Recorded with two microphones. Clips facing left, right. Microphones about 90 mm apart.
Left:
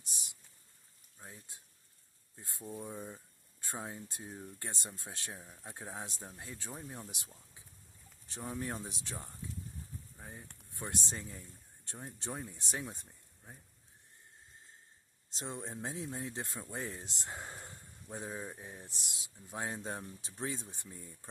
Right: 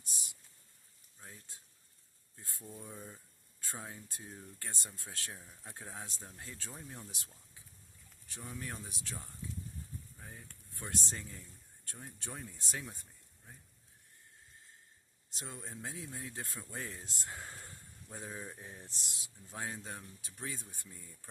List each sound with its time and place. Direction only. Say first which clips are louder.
1.2 s speech: left 2 dB; 15° left (ahead or behind)
8.3 s speech: left 5 dB; 30° left (ahead or behind)
15.3 s speech: left 5 dB; 25° left (ahead or behind)